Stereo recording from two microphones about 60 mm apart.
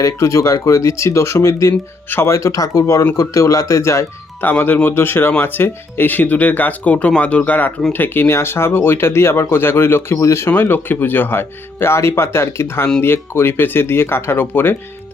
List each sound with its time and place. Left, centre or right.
0.0 s speech: left
1.5 s speech: left
4.4 s speech: left
10.2 s speech: left
10.5 s speech: left